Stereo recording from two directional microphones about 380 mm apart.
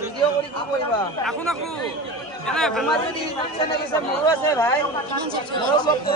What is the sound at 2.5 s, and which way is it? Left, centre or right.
Speech, centre.